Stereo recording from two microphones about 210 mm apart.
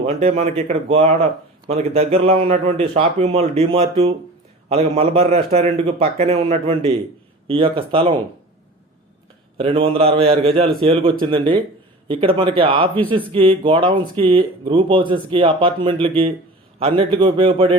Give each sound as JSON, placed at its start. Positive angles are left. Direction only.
{"t": 0.0, "sound": "a man's voice", "side_deg": -30}
{"t": 9.6, "sound": "speech", "side_deg": -25}